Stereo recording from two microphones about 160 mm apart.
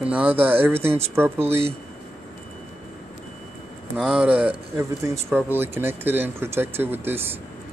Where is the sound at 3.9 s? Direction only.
5° right (ahead or behind).